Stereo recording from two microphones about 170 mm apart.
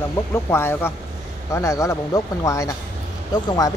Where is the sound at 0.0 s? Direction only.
15° left (ahead or behind).